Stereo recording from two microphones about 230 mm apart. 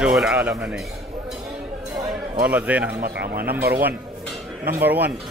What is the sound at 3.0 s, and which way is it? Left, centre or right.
Speech, right.